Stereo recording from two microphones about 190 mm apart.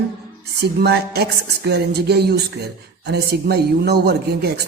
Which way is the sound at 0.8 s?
60° right (ahead or behind).